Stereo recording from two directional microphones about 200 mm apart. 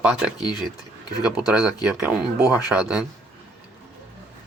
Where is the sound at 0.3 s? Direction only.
20° left (ahead or behind).